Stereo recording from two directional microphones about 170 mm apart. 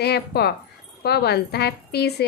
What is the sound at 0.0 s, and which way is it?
A woman's voice, 70° left (ahead or behind).